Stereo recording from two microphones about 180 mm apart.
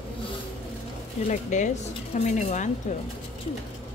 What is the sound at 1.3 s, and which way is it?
Speech, 40° left (ahead or behind).